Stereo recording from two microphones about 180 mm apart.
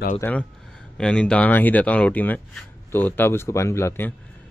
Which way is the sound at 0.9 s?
5° left (ahead or behind).